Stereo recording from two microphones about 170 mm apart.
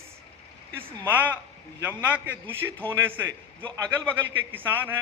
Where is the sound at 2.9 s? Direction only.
15° right (ahead or behind).